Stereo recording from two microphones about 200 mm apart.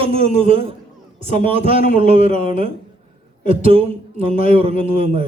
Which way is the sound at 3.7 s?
30° right (ahead or behind).